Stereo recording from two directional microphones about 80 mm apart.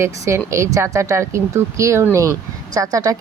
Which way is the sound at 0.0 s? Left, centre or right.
Right.